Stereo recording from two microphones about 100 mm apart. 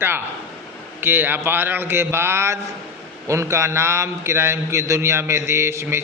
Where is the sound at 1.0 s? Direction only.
20° right (ahead or behind).